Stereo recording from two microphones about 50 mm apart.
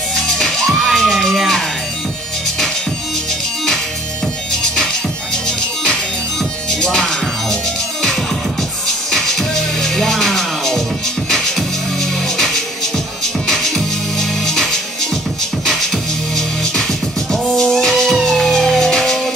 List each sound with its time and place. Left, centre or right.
0.1 s music: centre
0.8 s a sound: centre
6.7 s music: centre
8.8 s music: centre
17.3 s music: centre